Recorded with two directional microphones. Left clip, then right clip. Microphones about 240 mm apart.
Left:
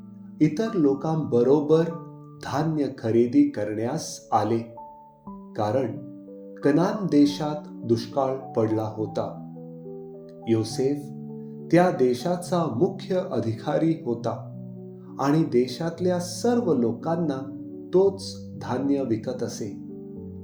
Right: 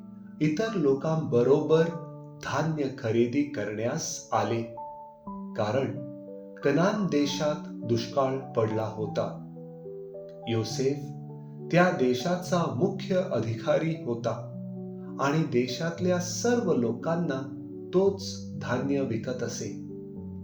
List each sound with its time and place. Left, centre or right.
0.3 s speech: left
6.6 s speech: left
10.4 s speech: left
11.7 s speech: left
18.6 s speech: left